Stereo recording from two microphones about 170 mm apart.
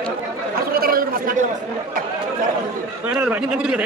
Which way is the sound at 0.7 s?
60° right (ahead or behind).